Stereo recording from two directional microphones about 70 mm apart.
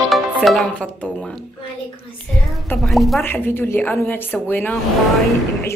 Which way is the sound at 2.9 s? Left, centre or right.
Centre.